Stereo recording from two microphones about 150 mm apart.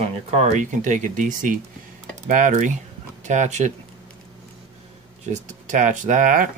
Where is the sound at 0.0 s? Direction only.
45° right (ahead or behind).